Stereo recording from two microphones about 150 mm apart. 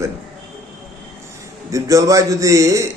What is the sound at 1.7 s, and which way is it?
A man's voice, 20° right (ahead or behind).